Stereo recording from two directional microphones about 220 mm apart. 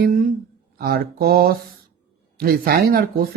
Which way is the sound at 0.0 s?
40° right (ahead or behind).